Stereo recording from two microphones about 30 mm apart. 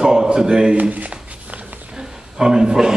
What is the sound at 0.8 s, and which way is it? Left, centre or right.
Speech, right.